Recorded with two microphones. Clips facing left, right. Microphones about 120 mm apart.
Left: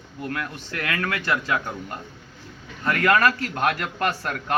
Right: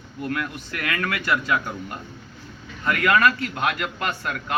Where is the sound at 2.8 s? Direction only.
30° left (ahead or behind).